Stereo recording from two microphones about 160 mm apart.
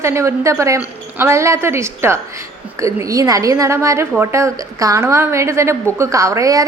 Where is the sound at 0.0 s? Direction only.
15° right (ahead or behind).